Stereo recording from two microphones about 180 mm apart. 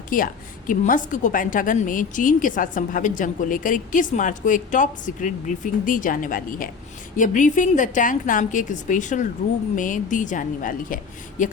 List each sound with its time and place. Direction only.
0.1 s a woman's voice: 50° left (ahead or behind)